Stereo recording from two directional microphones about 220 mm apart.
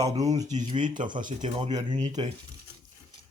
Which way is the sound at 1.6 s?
20° right (ahead or behind).